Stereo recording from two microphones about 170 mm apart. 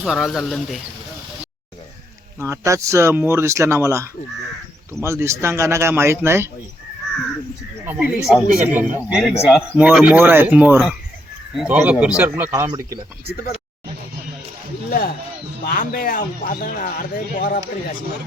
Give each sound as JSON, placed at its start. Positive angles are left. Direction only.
{"t": 0.0, "sound": "speech", "side_deg": 0}
{"t": 2.4, "sound": "speech", "side_deg": -15}
{"t": 7.9, "sound": "speech", "side_deg": -5}
{"t": 14.8, "sound": "a man's voice", "side_deg": 55}